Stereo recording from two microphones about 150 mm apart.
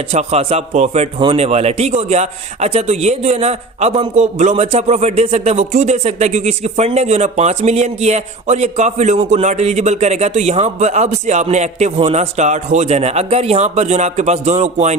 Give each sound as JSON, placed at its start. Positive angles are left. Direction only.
{"t": 0.1, "sound": "a man's voice", "side_deg": -45}